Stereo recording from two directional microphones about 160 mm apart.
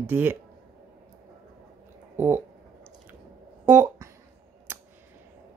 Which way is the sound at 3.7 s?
15° right (ahead or behind).